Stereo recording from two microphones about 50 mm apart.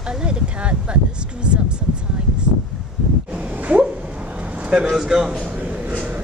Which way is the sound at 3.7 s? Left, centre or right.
Right.